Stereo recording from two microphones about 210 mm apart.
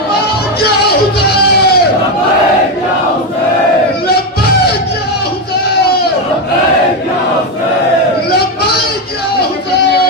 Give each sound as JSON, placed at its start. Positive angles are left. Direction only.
{"t": 0.6, "sound": "music", "side_deg": 50}